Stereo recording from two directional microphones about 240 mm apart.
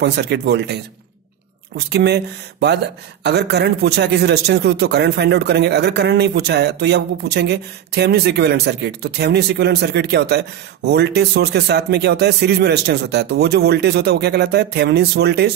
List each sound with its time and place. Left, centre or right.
0.0 s a man's voice: right
1.9 s a man's voice: right